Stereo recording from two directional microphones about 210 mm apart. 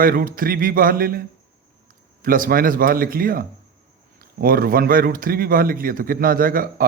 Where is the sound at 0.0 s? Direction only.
45° right (ahead or behind).